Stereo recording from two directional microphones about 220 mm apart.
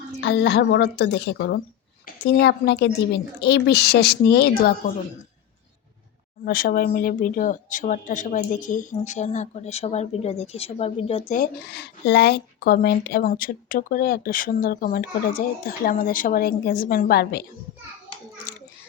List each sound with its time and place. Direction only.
0.2 s a woman's voice: 50° left (ahead or behind)
6.4 s speech: 40° left (ahead or behind); by 11.3 s 25° left (ahead or behind)
11.3 s speech: 50° left (ahead or behind)
18.5 s child singing: 40° left (ahead or behind)